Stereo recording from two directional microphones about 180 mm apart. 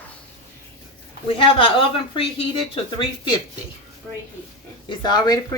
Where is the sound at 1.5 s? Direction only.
30° left (ahead or behind).